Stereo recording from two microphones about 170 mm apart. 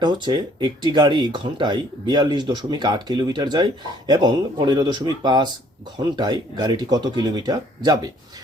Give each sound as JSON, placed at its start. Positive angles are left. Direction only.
{"t": 0.0, "sound": "speech", "side_deg": -25}